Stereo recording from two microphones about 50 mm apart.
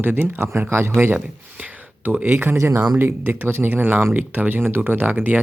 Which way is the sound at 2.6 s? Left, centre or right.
Right.